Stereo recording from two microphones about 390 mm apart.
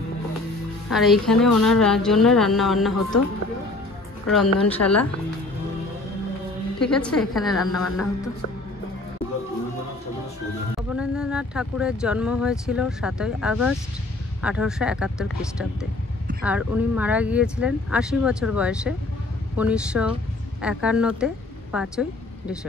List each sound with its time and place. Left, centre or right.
0.8 s speech: centre
4.7 s speech: centre
6.8 s speech: centre
10.8 s speech: centre